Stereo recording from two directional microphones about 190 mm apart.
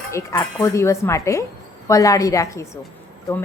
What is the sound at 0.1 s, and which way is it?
A woman's voice, 15° left (ahead or behind).